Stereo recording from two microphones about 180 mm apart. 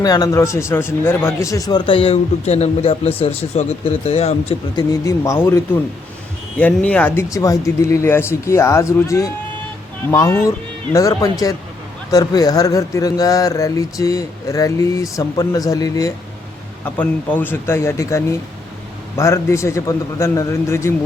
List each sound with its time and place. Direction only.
0.0 s a man's voice: 20° left (ahead or behind); by 4.5 s 35° left (ahead or behind)
4.8 s a man's voice: 20° left (ahead or behind)